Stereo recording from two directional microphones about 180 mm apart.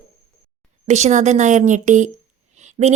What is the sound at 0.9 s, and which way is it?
Speech, 40° right (ahead or behind).